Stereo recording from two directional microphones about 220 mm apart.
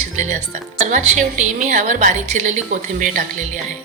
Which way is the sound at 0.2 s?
30° right (ahead or behind).